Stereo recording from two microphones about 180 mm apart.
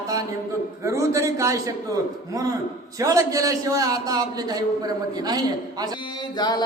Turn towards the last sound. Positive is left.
turn(degrees=25)  # may be behind; listen again after turning